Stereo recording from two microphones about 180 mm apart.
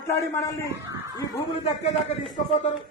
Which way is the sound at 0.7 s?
20° right (ahead or behind).